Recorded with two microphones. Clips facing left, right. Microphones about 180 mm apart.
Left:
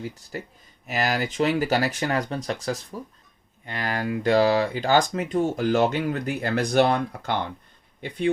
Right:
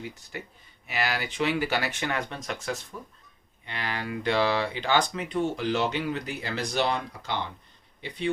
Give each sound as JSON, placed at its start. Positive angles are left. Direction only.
{"t": 0.0, "sound": "speech", "side_deg": 35}